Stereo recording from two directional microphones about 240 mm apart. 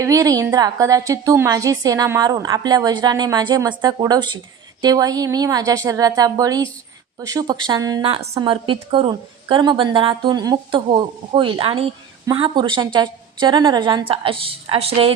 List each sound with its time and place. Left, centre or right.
0.0 s a woman's voice: centre